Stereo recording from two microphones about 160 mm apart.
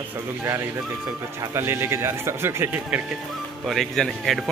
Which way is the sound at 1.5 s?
15° right (ahead or behind).